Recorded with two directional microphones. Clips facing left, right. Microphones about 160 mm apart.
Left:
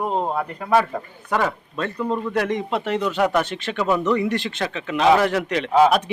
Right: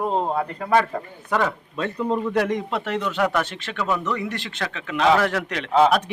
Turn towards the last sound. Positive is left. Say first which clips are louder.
# left 2 dB
turn(degrees=10)  # may be behind; listen again after turning